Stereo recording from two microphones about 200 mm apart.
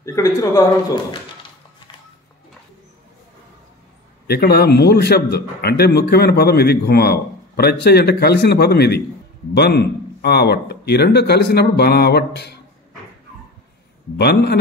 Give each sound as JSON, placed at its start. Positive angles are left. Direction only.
{"t": 0.0, "sound": "a man's voice", "side_deg": 15}
{"t": 4.3, "sound": "a man's voice", "side_deg": 50}
{"t": 14.1, "sound": "speech", "side_deg": 55}